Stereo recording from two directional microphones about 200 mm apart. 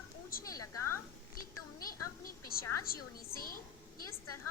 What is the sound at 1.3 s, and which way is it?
A woman's voice, 45° left (ahead or behind).